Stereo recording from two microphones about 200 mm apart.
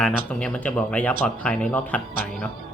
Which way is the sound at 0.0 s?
5° left (ahead or behind).